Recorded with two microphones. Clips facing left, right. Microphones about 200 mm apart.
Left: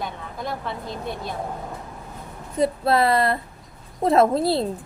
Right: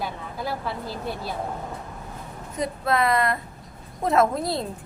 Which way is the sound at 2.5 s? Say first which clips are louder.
Left 5 dB; 30° left (ahead or behind).